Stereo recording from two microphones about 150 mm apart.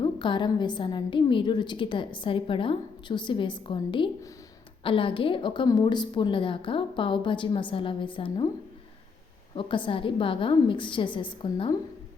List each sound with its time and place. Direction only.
0.0 s a woman's voice: 30° left (ahead or behind)
9.6 s a woman's voice: 35° left (ahead or behind)